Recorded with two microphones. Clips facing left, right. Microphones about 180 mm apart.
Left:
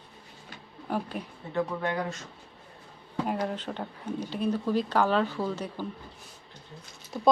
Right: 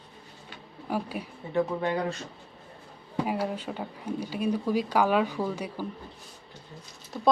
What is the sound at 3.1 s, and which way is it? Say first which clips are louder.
Speech: right 1 dB; 10° right (ahead or behind).